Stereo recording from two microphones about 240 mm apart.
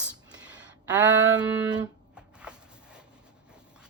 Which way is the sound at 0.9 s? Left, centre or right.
Centre.